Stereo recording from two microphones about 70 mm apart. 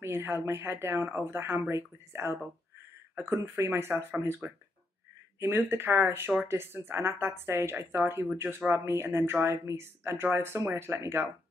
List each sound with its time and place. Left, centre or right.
0.0 s speech: right